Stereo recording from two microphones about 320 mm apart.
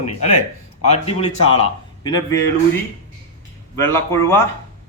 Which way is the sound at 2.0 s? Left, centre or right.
Centre.